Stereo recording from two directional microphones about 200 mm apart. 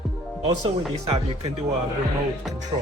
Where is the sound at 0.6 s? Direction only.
30° right (ahead or behind).